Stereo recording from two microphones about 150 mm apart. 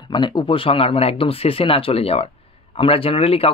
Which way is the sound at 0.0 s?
30° left (ahead or behind).